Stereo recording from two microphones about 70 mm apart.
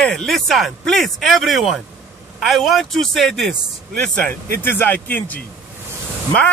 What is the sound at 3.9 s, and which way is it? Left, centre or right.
Speech, centre.